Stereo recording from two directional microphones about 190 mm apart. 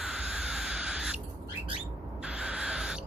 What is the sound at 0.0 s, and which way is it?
Owl, 5° right (ahead or behind).